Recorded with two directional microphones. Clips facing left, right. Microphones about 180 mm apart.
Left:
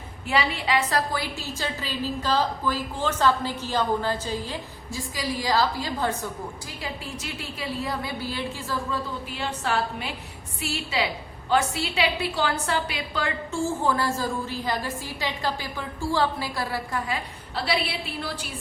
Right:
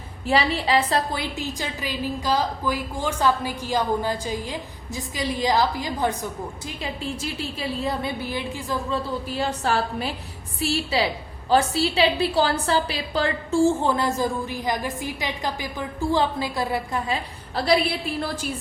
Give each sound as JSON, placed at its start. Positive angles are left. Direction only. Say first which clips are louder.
{"t": 0.3, "sound": "a woman's voice", "louder": "right 4 dB", "side_deg": -35}
{"t": 9.3, "sound": "a woman's voice", "louder": "right 3 dB", "side_deg": -40}
{"t": 17.5, "sound": "a woman's voice", "louder": "right 6 dB", "side_deg": -45}